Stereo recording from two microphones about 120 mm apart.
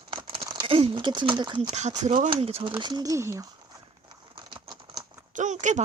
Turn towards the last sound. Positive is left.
turn(degrees=-90)